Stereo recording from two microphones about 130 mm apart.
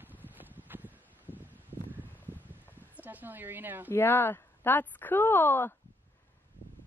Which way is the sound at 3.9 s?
15° left (ahead or behind).